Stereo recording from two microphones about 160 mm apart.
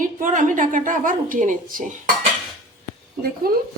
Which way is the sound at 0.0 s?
55° right (ahead or behind).